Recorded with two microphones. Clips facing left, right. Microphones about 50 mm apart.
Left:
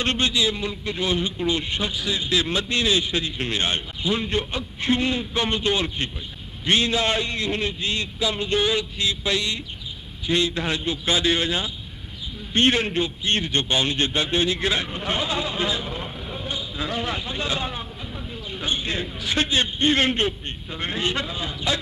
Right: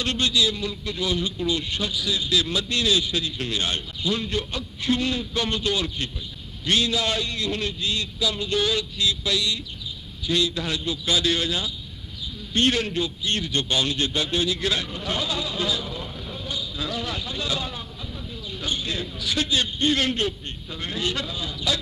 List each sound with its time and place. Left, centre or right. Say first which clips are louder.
0.0 s a man's voice: left 1 dB; left